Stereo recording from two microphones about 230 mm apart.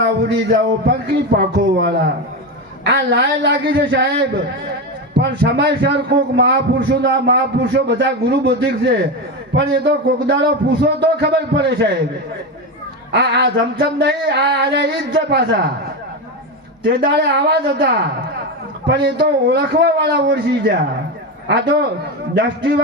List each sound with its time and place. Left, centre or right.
0.0 s a man's voice: right
13.1 s a man's voice: right
16.8 s a man's voice: right